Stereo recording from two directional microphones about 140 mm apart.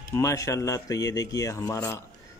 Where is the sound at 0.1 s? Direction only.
20° left (ahead or behind).